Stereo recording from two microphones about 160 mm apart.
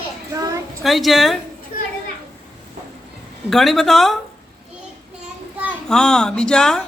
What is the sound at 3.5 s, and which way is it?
Speech, centre (ahead or behind).